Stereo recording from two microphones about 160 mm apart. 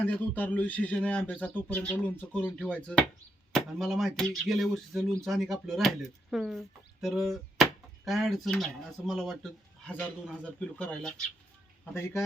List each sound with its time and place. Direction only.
0.0 s a man's voice: 10° left (ahead or behind)
11.9 s a man's voice: 15° left (ahead or behind)